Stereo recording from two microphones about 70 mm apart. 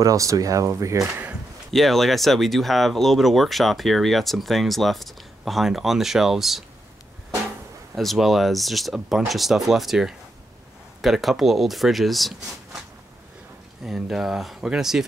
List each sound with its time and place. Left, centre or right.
0.0 s speech: right
1.7 s speech: centre
7.9 s speech: centre
13.8 s speech: centre